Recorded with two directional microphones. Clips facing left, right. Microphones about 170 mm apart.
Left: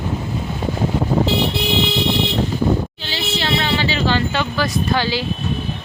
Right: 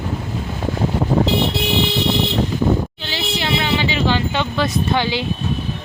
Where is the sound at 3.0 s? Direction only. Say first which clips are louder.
Even; 15° right (ahead or behind).